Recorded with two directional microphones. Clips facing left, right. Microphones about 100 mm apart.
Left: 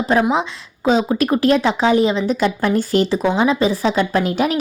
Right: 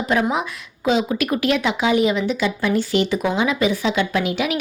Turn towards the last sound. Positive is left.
turn(degrees=40)  # may be behind; listen again after turning